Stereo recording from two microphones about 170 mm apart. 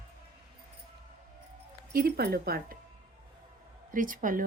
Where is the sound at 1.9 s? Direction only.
65° right (ahead or behind).